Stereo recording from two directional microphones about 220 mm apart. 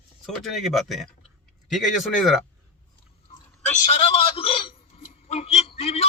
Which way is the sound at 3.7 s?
30° left (ahead or behind).